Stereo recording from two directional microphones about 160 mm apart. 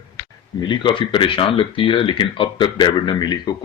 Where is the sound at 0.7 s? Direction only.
30° left (ahead or behind).